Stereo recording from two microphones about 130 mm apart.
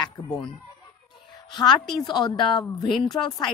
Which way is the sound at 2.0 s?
35° left (ahead or behind).